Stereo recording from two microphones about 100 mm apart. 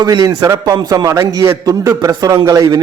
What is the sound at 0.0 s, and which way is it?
A man's voice, 40° right (ahead or behind).